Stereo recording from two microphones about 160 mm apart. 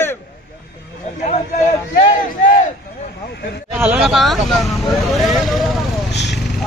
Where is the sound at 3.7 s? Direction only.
10° right (ahead or behind).